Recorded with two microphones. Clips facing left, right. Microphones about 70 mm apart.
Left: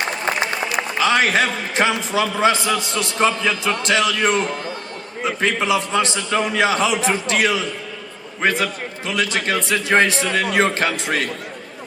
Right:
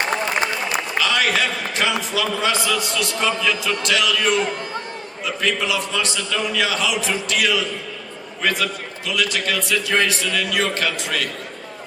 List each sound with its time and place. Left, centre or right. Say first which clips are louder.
0.5 s a man's voice: left 1 dB; left